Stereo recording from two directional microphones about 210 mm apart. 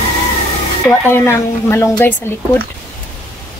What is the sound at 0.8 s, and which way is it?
Speech, 10° left (ahead or behind).